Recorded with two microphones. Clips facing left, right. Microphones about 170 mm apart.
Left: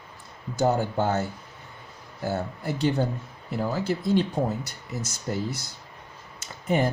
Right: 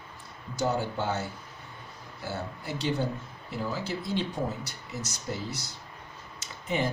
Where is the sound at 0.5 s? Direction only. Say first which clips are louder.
Left 5 dB; 50° left (ahead or behind).